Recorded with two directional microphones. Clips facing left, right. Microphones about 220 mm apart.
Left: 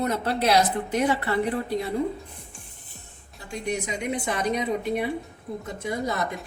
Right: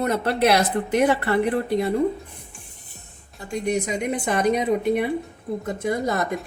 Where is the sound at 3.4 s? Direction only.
45° right (ahead or behind).